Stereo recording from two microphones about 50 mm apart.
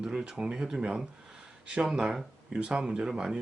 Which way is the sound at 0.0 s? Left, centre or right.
Centre.